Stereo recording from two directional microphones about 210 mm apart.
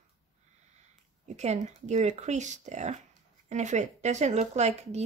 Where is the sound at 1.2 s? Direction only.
30° right (ahead or behind).